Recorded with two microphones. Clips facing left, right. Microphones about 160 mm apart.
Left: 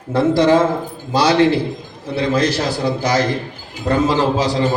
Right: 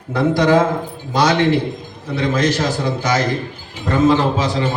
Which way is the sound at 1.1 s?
30° left (ahead or behind).